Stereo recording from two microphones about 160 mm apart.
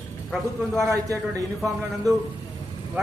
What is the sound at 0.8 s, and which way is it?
Speech, 20° right (ahead or behind).